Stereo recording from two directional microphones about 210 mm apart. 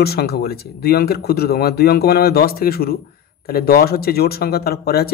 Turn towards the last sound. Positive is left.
turn(degrees=45)  # may be behind; listen again after turning